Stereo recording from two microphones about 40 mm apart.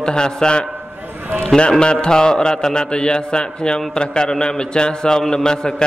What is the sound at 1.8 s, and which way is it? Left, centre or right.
A man's voice, left.